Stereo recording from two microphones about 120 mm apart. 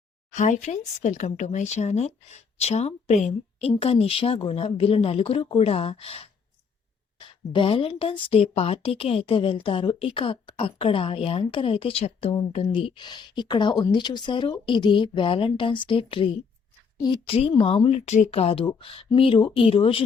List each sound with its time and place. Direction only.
0.3 s speech: 90° left; by 12.4 s 55° left (ahead or behind)
12.5 s a woman's voice: 45° left (ahead or behind)